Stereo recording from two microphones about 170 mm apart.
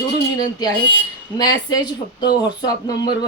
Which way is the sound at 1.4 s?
25° left (ahead or behind).